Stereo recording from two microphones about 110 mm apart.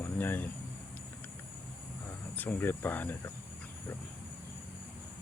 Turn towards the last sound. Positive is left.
turn(degrees=15)  # may be behind; listen again after turning